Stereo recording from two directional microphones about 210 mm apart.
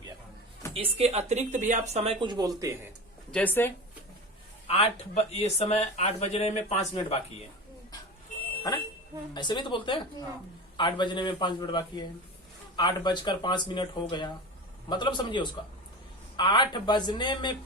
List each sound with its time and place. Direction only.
0.7 s speech: 25° right (ahead or behind)
3.3 s speech: 10° left (ahead or behind)
4.7 s speech: 30° left (ahead or behind)
9.3 s speech: 20° left (ahead or behind)